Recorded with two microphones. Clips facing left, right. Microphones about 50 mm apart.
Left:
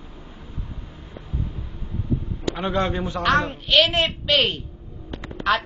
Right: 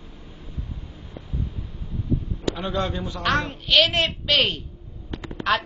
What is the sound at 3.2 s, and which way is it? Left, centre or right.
A woman's voice, centre.